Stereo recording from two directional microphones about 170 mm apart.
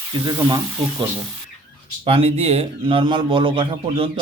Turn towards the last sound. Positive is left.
turn(degrees=-30)  # may be behind; listen again after turning